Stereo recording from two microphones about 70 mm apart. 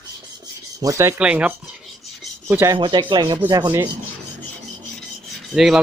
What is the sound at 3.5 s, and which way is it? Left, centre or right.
Rub, right.